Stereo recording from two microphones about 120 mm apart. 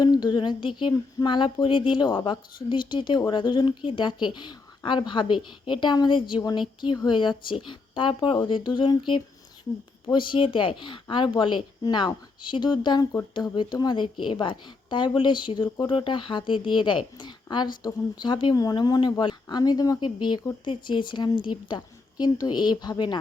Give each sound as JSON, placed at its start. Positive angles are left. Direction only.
{"t": 0.0, "sound": "a woman's voice", "side_deg": 35}